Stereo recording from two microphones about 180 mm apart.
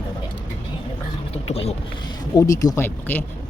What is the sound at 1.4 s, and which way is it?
Speech, 35° left (ahead or behind).